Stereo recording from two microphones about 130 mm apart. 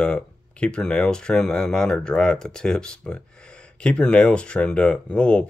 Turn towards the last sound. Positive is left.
turn(degrees=10)  # may be behind; listen again after turning